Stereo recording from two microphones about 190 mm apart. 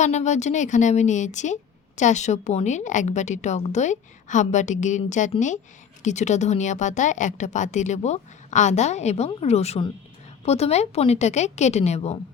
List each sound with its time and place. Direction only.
0.0 s a woman's voice: 35° left (ahead or behind)